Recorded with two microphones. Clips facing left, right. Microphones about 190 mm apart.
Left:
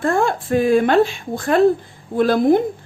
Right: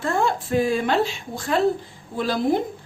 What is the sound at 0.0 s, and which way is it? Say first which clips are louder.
A woman's voice: left 4 dB; 55° left (ahead or behind).